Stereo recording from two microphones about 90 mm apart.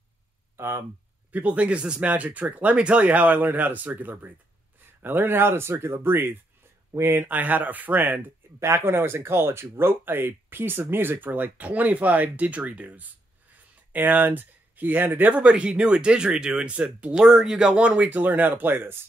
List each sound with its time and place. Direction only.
0.6 s speech: 25° right (ahead or behind)
1.3 s speech: 15° right (ahead or behind)